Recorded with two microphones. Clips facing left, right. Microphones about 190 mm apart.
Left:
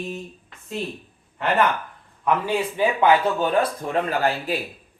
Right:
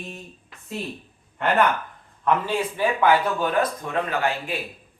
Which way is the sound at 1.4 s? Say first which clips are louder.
Even; centre (ahead or behind).